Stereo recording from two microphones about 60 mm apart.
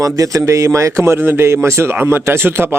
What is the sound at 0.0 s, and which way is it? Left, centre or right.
A man's voice, right.